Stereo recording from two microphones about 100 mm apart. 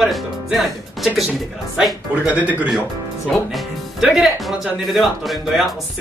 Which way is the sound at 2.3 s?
15° right (ahead or behind).